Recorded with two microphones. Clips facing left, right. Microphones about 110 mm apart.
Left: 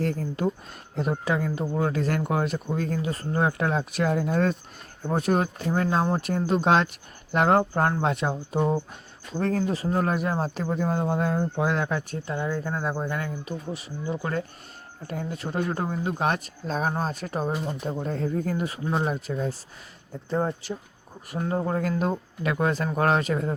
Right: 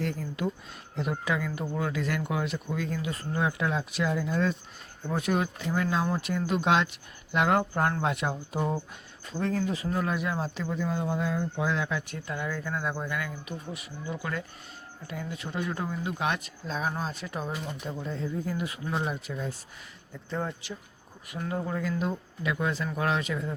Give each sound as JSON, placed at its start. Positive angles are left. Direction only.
{"t": 0.0, "sound": "speech", "side_deg": 40}
{"t": 1.9, "sound": "speech", "side_deg": 40}
{"t": 9.4, "sound": "speech", "side_deg": 45}
{"t": 12.1, "sound": "speech", "side_deg": 30}
{"t": 18.6, "sound": "speech", "side_deg": 35}